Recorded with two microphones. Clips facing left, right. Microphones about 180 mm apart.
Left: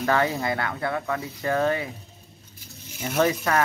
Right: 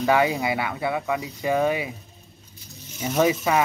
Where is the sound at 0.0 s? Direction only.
10° right (ahead or behind).